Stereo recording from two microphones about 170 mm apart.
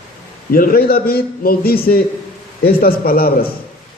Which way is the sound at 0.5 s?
60° left (ahead or behind).